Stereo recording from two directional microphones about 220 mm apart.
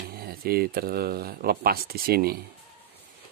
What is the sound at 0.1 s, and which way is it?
Speech, 45° right (ahead or behind).